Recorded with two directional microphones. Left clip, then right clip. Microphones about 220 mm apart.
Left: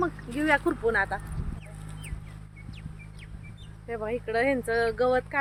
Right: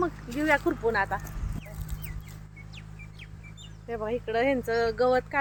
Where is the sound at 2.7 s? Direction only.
35° right (ahead or behind).